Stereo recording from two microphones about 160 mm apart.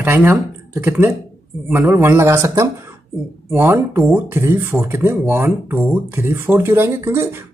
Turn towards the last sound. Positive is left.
turn(degrees=-15)  # may be behind; listen again after turning